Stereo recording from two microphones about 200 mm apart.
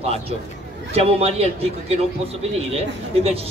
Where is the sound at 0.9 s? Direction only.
30° right (ahead or behind).